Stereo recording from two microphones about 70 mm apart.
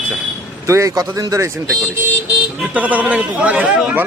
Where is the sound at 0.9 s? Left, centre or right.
Right.